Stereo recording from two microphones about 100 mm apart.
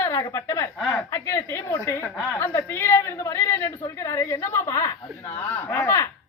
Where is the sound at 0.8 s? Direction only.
5° left (ahead or behind).